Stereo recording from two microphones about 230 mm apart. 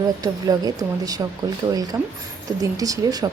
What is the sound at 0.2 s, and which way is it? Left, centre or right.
Speech, centre.